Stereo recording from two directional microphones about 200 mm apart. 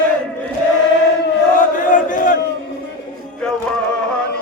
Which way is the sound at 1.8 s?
40° left (ahead or behind).